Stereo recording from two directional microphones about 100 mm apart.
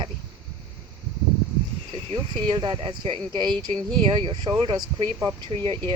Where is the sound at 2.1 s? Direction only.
55° right (ahead or behind).